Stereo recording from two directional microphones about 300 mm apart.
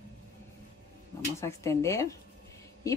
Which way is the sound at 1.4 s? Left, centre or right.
Centre.